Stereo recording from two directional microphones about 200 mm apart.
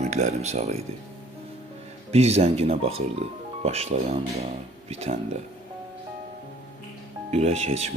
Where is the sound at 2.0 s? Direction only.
35° right (ahead or behind).